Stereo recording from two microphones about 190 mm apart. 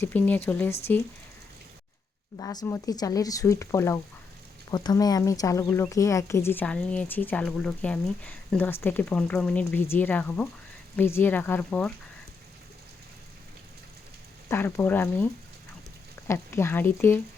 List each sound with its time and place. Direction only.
0.0 s speech: 10° left (ahead or behind)
2.4 s speech: 20° left (ahead or behind)
14.5 s speech: 10° left (ahead or behind)